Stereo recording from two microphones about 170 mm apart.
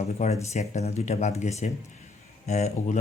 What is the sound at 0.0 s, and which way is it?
Speech, 40° left (ahead or behind).